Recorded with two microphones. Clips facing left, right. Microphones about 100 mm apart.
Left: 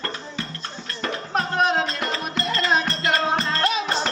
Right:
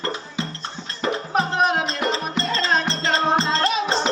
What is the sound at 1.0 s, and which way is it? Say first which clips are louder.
Music: right 3 dB; 5° right (ahead or behind).